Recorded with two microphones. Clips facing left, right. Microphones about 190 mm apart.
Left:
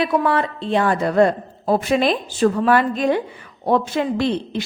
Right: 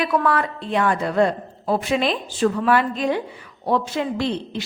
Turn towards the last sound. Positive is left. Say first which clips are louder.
# left 3 dB
turn(degrees=55)  # may be behind; listen again after turning